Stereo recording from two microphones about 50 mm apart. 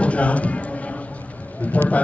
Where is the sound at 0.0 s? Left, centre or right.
Left.